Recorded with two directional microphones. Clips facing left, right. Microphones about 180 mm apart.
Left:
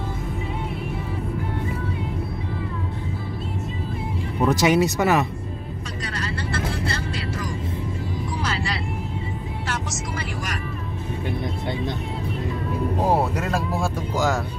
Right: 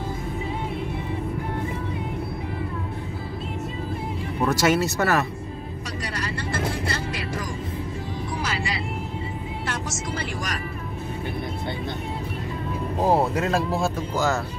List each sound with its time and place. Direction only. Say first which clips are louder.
4.5 s speech: left 3 dB; 15° left (ahead or behind)
13.0 s speech: right 3 dB; 10° left (ahead or behind)